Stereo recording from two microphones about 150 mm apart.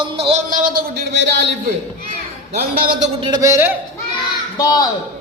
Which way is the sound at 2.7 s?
75° right (ahead or behind).